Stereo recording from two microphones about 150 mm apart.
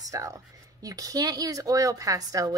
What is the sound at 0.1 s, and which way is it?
A woman's voice, 20° right (ahead or behind).